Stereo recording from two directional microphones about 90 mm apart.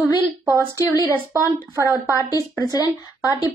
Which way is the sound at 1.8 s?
35° left (ahead or behind).